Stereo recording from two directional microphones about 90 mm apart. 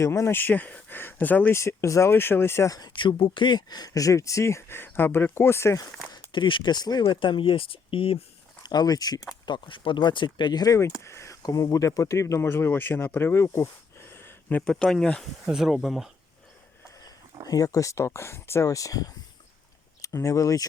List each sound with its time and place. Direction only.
0.0 s speech: 30° left (ahead or behind)
1.5 s speech: 35° left (ahead or behind)
2.9 s speech: 65° left (ahead or behind); by 5.8 s 30° left (ahead or behind)
6.1 s speech: 65° left (ahead or behind)
7.0 s speech: 65° left (ahead or behind); by 8.2 s 90° left
8.6 s speech: 50° left (ahead or behind)
9.5 s speech: 70° left (ahead or behind); by 10.8 s 50° left (ahead or behind)
11.0 s speech: 30° left (ahead or behind)
14.6 s speech: 10° left (ahead or behind)
15.4 s speech: 5° right (ahead or behind)
17.5 s speech: 40° left (ahead or behind)